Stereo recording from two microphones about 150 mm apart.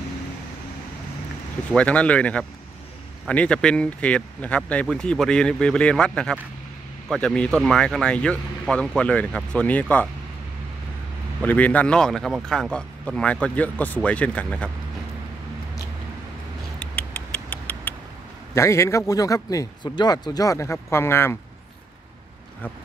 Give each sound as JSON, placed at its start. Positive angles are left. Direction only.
{"t": 1.8, "sound": "speech", "side_deg": 10}
{"t": 11.4, "sound": "speech", "side_deg": 10}
{"t": 16.8, "sound": "rodents", "side_deg": 10}
{"t": 18.5, "sound": "a man's voice", "side_deg": 20}